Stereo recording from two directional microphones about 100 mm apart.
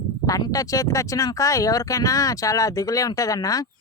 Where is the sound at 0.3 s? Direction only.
35° left (ahead or behind).